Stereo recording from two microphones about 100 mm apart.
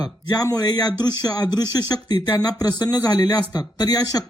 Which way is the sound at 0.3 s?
40° left (ahead or behind).